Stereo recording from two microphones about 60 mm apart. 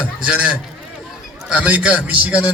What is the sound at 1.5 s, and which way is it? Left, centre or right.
Speech, right.